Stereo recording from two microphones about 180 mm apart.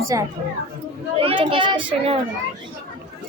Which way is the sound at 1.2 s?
30° right (ahead or behind).